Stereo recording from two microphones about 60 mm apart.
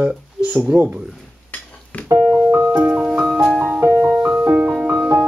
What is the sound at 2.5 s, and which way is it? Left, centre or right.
Music, right.